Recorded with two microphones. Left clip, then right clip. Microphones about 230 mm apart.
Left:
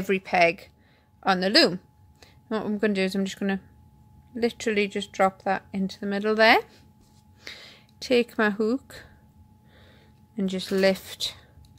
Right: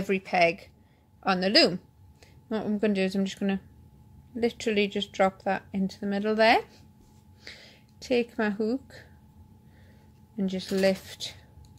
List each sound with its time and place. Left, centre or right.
0.0 s a woman's voice: left
10.3 s speech: left